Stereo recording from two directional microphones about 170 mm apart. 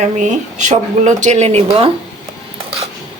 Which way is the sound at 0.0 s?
45° right (ahead or behind).